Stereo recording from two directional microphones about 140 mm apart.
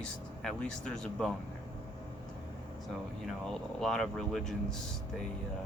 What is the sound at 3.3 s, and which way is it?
Speech, 5° left (ahead or behind).